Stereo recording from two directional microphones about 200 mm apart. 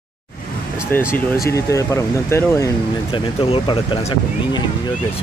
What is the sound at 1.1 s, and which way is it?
Speech, 15° left (ahead or behind).